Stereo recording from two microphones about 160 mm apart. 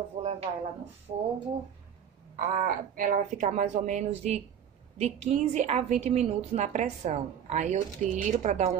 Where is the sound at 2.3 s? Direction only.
55° right (ahead or behind).